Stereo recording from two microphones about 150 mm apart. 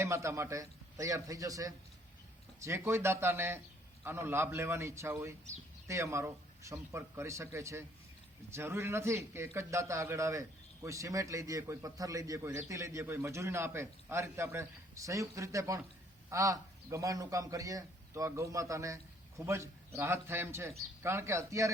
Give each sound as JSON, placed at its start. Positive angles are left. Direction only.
{"t": 0.0, "sound": "a man's voice", "side_deg": -20}